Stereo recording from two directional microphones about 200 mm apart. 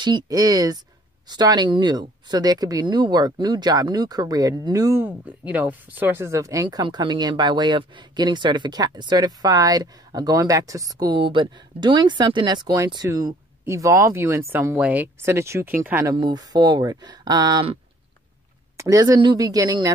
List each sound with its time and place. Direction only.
0.0 s speech: 20° right (ahead or behind)
16.2 s speech: 20° right (ahead or behind)
18.8 s speech: 15° right (ahead or behind)